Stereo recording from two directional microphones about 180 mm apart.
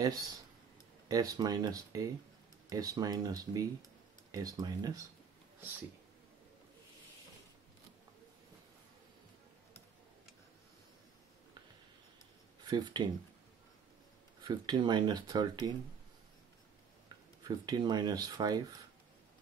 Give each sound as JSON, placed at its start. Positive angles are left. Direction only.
{"t": 0.0, "sound": "speech", "side_deg": -20}
{"t": 12.6, "sound": "speech", "side_deg": -25}
{"t": 14.4, "sound": "speech", "side_deg": -25}
{"t": 17.4, "sound": "speech", "side_deg": -20}